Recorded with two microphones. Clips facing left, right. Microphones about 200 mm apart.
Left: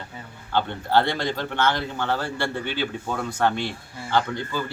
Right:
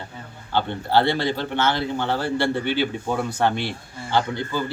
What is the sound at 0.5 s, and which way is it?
Speech, 15° right (ahead or behind).